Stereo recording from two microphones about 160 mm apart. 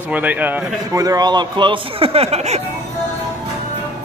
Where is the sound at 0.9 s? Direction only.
20° right (ahead or behind); by 2.6 s 40° right (ahead or behind).